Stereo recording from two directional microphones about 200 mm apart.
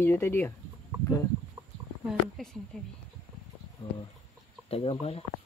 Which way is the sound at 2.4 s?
Centre (ahead or behind).